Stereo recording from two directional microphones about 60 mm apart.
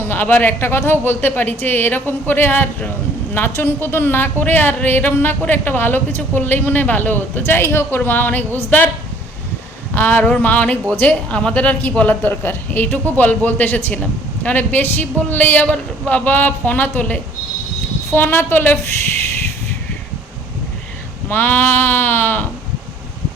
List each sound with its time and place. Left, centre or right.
0.0 s a woman's voice: left
9.9 s a woman's voice: left
21.2 s a woman's voice: left